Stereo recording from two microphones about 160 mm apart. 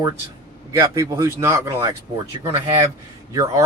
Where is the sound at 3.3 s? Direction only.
20° right (ahead or behind).